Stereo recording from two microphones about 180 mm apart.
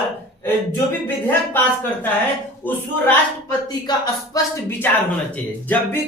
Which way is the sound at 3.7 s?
20° left (ahead or behind).